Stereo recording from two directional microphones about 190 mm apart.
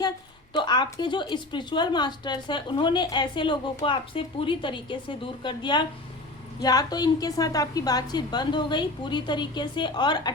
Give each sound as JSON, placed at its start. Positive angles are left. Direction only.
{"t": 0.5, "sound": "speech", "side_deg": 25}